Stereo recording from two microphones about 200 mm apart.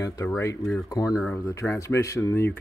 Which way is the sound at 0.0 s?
15° left (ahead or behind).